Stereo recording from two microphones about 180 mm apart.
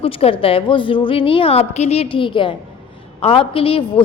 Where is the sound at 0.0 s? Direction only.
30° left (ahead or behind).